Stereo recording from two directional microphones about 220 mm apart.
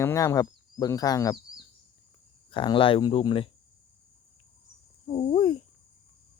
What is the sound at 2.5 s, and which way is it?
Speech, 20° left (ahead or behind).